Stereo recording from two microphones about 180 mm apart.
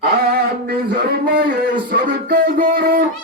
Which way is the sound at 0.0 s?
60° right (ahead or behind).